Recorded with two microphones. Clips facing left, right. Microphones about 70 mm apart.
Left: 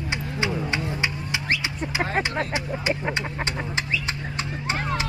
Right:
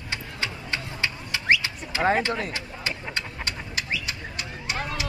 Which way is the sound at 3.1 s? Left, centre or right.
Left.